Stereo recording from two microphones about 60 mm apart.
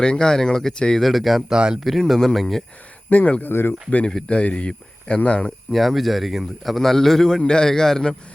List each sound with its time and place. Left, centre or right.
0.0 s speech: centre
1.0 s speech: centre
1.8 s a man's voice: centre
3.1 s speech: left
3.5 s speech: left
3.8 s speech: left
5.7 s a man's voice: centre